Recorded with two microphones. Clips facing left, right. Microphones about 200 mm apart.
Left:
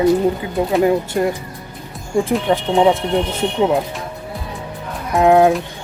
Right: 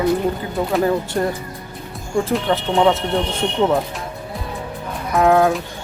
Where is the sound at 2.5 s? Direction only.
15° left (ahead or behind).